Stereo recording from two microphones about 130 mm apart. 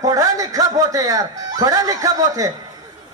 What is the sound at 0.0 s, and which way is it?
Speech, 25° right (ahead or behind).